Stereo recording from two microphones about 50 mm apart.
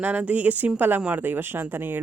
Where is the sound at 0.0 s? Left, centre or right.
Right.